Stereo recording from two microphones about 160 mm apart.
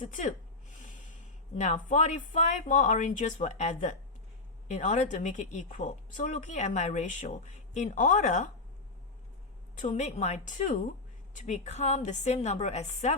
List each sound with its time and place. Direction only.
0.0 s a woman's voice: 55° left (ahead or behind)
1.5 s a woman's voice: 50° left (ahead or behind)
9.7 s a woman's voice: 45° left (ahead or behind)